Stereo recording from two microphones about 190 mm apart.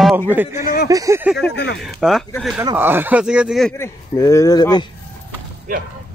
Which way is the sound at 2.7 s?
10° right (ahead or behind).